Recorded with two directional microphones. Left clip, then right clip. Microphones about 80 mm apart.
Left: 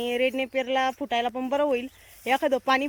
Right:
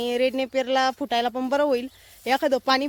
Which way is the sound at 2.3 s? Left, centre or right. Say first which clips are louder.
Right 2 dB; centre.